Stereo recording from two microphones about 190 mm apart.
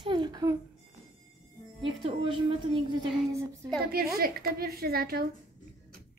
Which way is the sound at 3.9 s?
50° right (ahead or behind).